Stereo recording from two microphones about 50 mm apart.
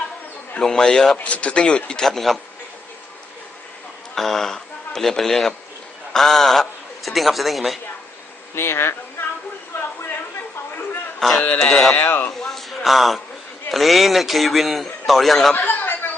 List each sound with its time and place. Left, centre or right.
0.6 s a man's voice: centre
1.2 s a man's voice: left
2.0 s a man's voice: centre
4.1 s a man's voice: centre
8.5 s speech: left
11.2 s a man's voice: centre
11.9 s speech: left
12.4 s a sound: centre
13.7 s a man's voice: centre
15.5 s a sound: left